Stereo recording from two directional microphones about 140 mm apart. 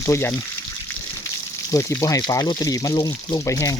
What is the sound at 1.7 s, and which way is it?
Speech, 20° left (ahead or behind).